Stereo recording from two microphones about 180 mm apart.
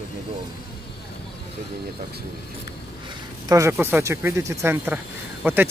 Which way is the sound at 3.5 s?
15° right (ahead or behind).